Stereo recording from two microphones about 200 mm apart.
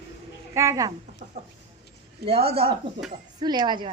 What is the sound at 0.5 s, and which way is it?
Speech, 15° right (ahead or behind).